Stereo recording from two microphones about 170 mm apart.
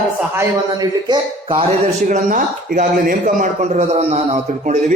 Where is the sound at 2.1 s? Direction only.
50° right (ahead or behind).